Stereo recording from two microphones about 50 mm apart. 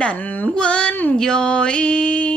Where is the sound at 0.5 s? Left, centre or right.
Left.